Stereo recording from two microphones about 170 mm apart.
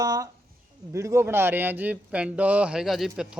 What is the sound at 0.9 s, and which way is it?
A man's voice, 15° right (ahead or behind).